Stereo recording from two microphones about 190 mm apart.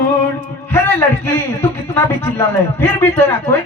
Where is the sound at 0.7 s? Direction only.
10° left (ahead or behind).